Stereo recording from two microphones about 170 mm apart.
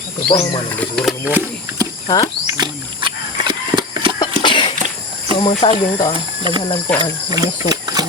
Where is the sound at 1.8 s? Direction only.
20° right (ahead or behind).